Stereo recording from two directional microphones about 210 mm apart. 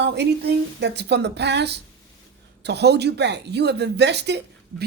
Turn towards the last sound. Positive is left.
turn(degrees=-55)  # may be behind; listen again after turning